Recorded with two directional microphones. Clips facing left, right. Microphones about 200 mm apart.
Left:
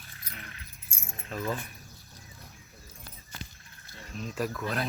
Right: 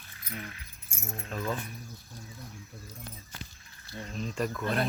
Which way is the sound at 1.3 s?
5° left (ahead or behind).